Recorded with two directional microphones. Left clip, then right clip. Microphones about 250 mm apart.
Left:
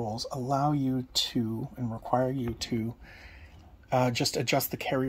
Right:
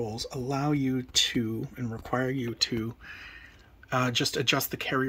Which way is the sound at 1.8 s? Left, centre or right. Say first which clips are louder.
Left 4 dB; right.